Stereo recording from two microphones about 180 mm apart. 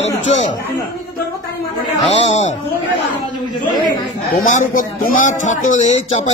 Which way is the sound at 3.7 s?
25° left (ahead or behind).